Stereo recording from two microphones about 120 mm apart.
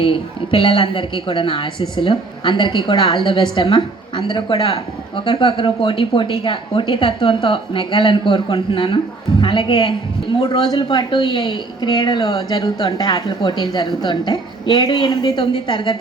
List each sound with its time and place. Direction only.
0.0 s a woman's voice: 50° left (ahead or behind)